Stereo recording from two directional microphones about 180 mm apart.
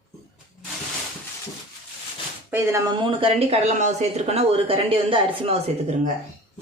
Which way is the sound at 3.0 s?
30° right (ahead or behind).